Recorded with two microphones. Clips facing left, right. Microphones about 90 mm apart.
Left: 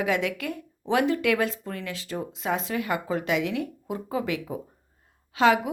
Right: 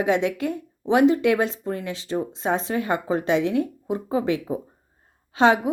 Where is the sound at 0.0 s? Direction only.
25° right (ahead or behind).